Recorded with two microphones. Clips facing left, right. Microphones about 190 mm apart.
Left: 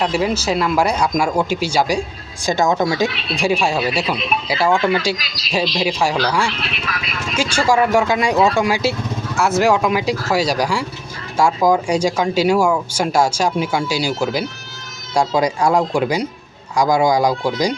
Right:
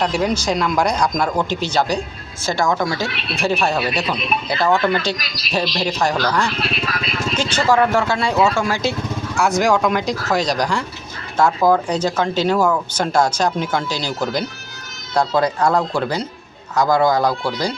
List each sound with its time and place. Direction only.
0.0 s speech: 5° left (ahead or behind)
6.5 s speech: 40° right (ahead or behind)
7.5 s speech: 10° left (ahead or behind)